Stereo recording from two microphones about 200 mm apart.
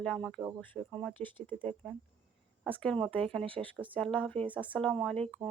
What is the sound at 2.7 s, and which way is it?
Speech, 5° left (ahead or behind).